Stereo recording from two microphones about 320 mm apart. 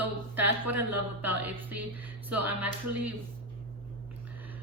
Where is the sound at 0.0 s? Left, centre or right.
Centre.